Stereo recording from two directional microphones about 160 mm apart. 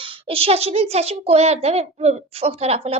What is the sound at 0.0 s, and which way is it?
A woman's voice, 35° right (ahead or behind).